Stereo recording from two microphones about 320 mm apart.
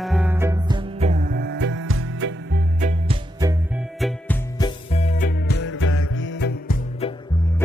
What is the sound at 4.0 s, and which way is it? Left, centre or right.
Music, centre.